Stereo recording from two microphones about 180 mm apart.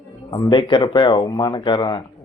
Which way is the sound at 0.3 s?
25° left (ahead or behind).